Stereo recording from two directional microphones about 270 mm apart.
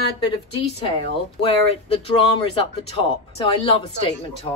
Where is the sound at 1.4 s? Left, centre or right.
Left.